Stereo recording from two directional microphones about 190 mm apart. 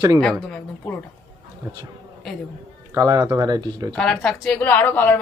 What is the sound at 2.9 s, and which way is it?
Speech, 15° right (ahead or behind).